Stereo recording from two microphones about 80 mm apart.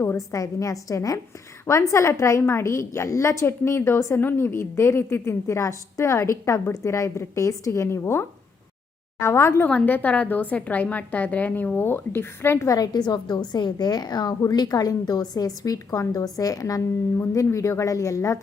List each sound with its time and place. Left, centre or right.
0.3 s a woman's voice: left
9.6 s a woman's voice: centre
12.6 s a woman's voice: left